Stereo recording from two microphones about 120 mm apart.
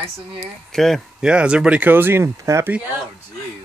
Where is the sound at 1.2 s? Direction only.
10° right (ahead or behind); by 2.7 s 25° right (ahead or behind).